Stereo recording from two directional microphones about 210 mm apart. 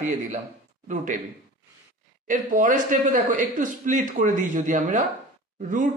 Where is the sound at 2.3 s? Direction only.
40° right (ahead or behind).